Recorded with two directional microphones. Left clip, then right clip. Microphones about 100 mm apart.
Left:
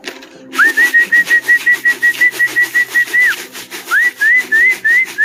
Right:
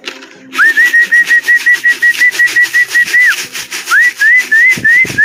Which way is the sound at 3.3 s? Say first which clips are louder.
Right 7 dB; 30° left (ahead or behind).